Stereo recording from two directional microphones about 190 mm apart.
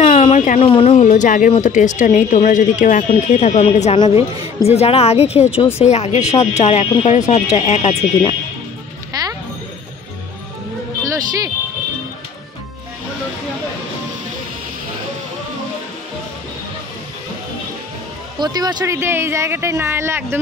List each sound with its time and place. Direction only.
0.0 s a sound: 30° left (ahead or behind)
0.6 s speech: 30° left (ahead or behind)
11.1 s music: 20° right (ahead or behind)
18.4 s speech: 20° right (ahead or behind)